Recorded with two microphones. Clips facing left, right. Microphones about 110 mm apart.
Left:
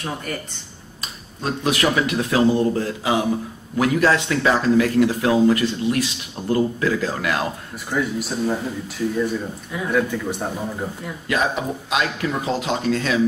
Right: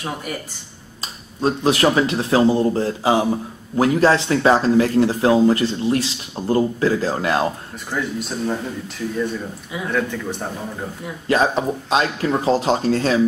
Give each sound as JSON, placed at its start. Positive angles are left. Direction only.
{"t": 0.0, "sound": "speech", "side_deg": -10}
{"t": 1.0, "sound": "speech", "side_deg": -30}
{"t": 7.9, "sound": "a man's voice", "side_deg": 5}
{"t": 11.2, "sound": "speech", "side_deg": -30}